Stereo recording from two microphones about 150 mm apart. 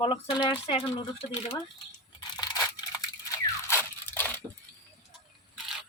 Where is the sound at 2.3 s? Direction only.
30° left (ahead or behind).